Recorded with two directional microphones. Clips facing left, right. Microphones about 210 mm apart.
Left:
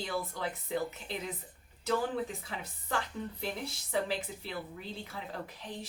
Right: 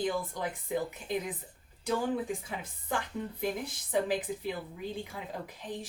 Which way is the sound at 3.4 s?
15° right (ahead or behind).